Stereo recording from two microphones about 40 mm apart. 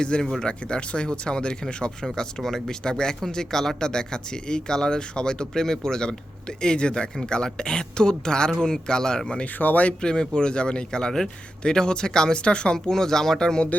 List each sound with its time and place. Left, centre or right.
0.2 s speech: centre
0.4 s speech: left
2.4 s speech: centre
9.6 s speech: left
10.0 s speech: left
12.7 s speech: centre